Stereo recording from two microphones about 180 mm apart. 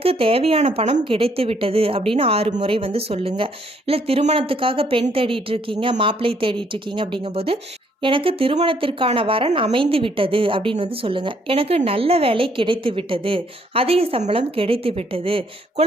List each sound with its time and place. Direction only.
0.0 s a woman's voice: 30° right (ahead or behind)